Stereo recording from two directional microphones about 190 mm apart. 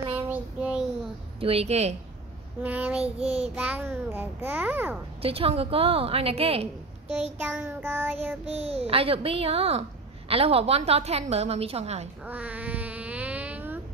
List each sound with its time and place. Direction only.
0.3 s child singing: 5° right (ahead or behind)
1.4 s a child's voice: 30° right (ahead or behind)
2.6 s a child's voice: 10° right (ahead or behind)
3.0 s a child's voice: 35° right (ahead or behind)
3.5 s a child's voice: 5° right (ahead or behind)
5.2 s a child's voice: 30° right (ahead or behind)
7.4 s a child's voice: 10° right (ahead or behind)
8.5 s a child's voice: 30° right (ahead or behind)
12.3 s a sound: 10° right (ahead or behind)